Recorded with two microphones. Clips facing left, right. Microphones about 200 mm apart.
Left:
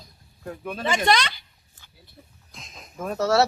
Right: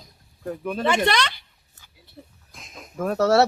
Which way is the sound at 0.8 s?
60° right (ahead or behind).